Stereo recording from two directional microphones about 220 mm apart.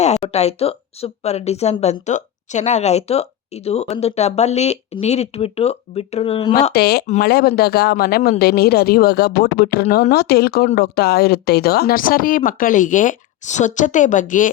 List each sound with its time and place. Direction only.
0.0 s speech: 30° left (ahead or behind)
6.7 s speech: 45° left (ahead or behind)